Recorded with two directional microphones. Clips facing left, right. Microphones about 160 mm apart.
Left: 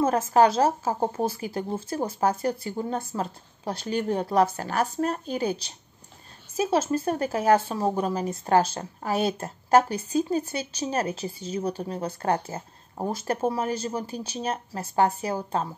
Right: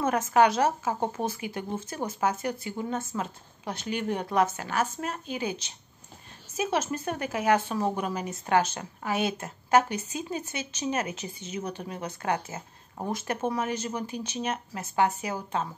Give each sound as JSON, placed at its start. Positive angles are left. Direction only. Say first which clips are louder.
{"t": 0.0, "sound": "a woman's voice", "louder": "left 3 dB", "side_deg": 30}